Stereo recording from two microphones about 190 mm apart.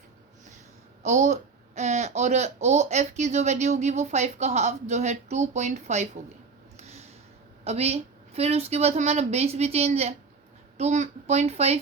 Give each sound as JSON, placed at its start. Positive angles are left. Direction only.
{"t": 1.0, "sound": "speech", "side_deg": -40}
{"t": 6.7, "sound": "a sound", "side_deg": -35}
{"t": 7.6, "sound": "speech", "side_deg": -35}